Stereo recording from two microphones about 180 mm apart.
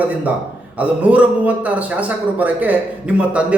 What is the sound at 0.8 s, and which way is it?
A man's voice, 10° right (ahead or behind).